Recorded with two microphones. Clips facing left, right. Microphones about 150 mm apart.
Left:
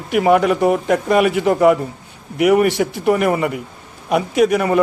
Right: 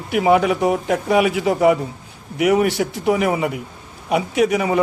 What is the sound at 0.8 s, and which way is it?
Speech, 10° right (ahead or behind).